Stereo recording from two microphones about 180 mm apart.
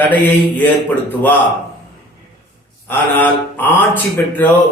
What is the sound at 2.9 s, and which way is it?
A man's voice, 10° left (ahead or behind).